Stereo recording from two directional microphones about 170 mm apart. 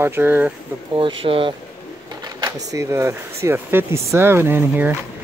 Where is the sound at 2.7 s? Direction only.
15° right (ahead or behind).